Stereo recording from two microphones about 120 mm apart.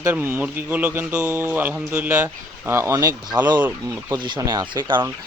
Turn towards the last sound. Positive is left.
turn(degrees=-40)  # may be behind; listen again after turning